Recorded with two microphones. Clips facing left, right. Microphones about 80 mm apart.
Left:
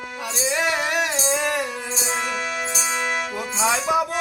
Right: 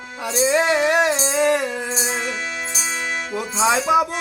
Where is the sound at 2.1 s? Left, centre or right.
Left.